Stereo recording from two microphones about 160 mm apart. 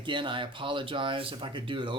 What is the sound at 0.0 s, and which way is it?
Speech, 30° right (ahead or behind).